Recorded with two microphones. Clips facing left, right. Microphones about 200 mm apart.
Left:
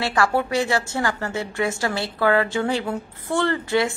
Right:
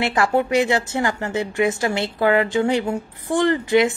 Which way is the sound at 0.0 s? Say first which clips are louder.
Right 2 dB; 20° right (ahead or behind).